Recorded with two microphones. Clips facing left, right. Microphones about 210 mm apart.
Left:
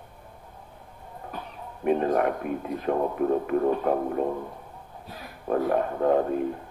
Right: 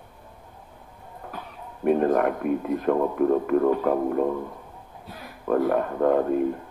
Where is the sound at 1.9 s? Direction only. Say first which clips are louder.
Right 3 dB; 50° right (ahead or behind).